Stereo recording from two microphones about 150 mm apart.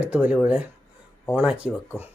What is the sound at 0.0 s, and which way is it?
Speech, 10° right (ahead or behind).